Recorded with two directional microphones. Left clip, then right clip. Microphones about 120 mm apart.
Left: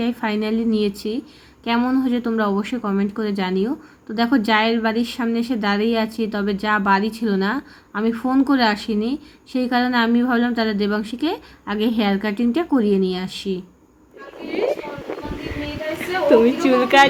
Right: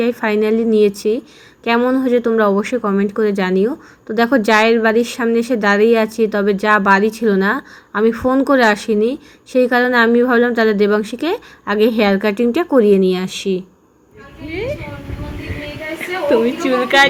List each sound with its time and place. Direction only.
0.0 s speech: 25° right (ahead or behind)
16.0 s a sound: 10° left (ahead or behind)
16.6 s speech: 10° left (ahead or behind)